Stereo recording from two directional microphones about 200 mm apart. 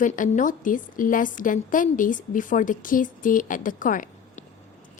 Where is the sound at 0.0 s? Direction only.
40° left (ahead or behind).